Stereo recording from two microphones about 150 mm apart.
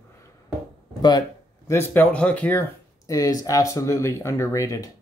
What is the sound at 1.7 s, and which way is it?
Speech, 15° left (ahead or behind).